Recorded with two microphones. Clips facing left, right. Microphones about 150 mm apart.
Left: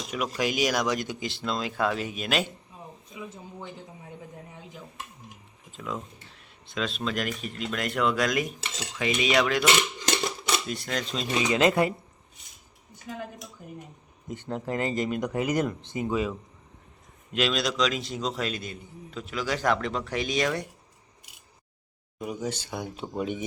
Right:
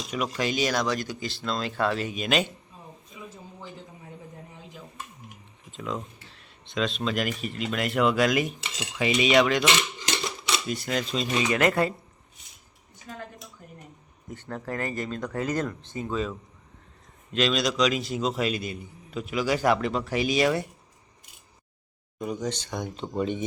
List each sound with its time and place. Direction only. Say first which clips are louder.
0.1 s speech: even; 10° left (ahead or behind)
1.5 s speech: right 1 dB; 10° left (ahead or behind)
5.7 s a man's voice: right 2 dB; 5° left (ahead or behind)
10.7 s a man's voice: right 3 dB; 5° right (ahead or behind)
11.5 s speech: left 2 dB; 20° left (ahead or behind)
13.1 s speech: left 3 dB; 15° left (ahead or behind)
14.3 s a man's voice: left 3 dB; 20° left (ahead or behind); by 20.7 s 5° right (ahead or behind)
22.2 s speech: right 2 dB; 10° left (ahead or behind)